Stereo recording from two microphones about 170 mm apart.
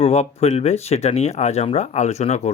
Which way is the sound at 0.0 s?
35° left (ahead or behind).